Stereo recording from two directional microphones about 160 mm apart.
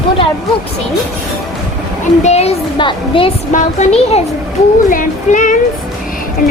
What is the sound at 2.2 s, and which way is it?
A woman's voice, 40° left (ahead or behind).